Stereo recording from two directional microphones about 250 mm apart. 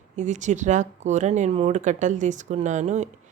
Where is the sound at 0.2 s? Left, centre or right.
Right.